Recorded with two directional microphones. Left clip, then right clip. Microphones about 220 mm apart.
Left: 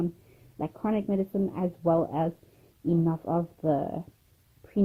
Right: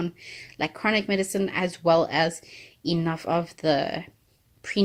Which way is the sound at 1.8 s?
30° right (ahead or behind).